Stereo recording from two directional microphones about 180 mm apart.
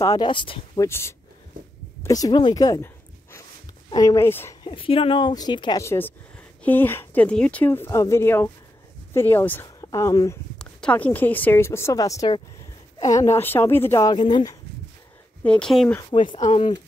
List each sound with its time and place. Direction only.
0.0 s speech: 20° left (ahead or behind)
0.8 s speech: 15° left (ahead or behind)
2.0 s a sound: 20° left (ahead or behind)
3.9 s speech: 20° left (ahead or behind)
4.6 s speech: 30° left (ahead or behind)
10.6 s speech: 5° left (ahead or behind); by 14.6 s 20° left (ahead or behind)
15.4 s speech: 5° left (ahead or behind)
16.1 s speech: 25° left (ahead or behind)